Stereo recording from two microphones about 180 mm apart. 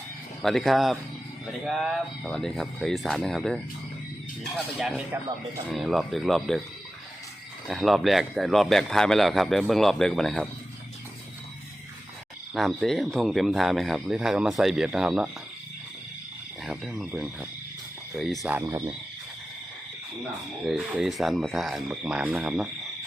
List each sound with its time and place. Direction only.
0.4 s a man's voice: centre (ahead or behind)
7.7 s a man's voice: centre (ahead or behind)
12.5 s a man's voice: centre (ahead or behind)
16.6 s a man's voice: centre (ahead or behind)
18.2 s a man's voice: centre (ahead or behind)
18.6 s speech: 15° right (ahead or behind)
20.7 s a man's voice: 5° right (ahead or behind)